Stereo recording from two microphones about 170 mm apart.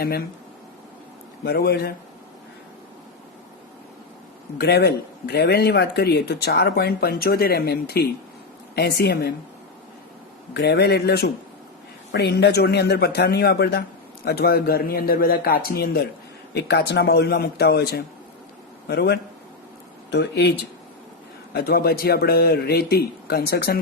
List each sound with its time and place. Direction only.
1.5 s speech: 70° left (ahead or behind)
4.5 s speech: 70° left (ahead or behind)
10.5 s speech: 75° left (ahead or behind)